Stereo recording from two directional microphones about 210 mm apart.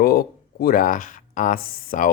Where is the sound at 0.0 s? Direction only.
45° left (ahead or behind).